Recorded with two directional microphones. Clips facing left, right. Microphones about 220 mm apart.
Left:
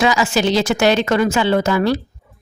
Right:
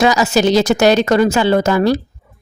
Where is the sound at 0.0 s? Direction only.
40° right (ahead or behind).